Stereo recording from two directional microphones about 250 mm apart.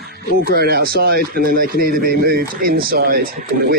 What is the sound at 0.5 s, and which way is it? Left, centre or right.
A man's voice, right.